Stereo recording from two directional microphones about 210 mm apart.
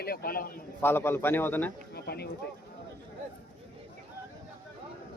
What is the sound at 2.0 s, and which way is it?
Speech, 50° left (ahead or behind).